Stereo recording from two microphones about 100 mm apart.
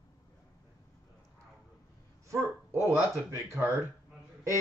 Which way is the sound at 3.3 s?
25° right (ahead or behind).